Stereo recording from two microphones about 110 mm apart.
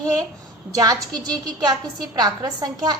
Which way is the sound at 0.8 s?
35° right (ahead or behind).